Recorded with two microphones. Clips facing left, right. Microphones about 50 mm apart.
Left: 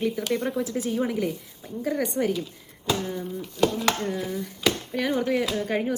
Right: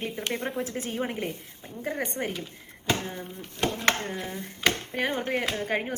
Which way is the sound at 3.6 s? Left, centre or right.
Right.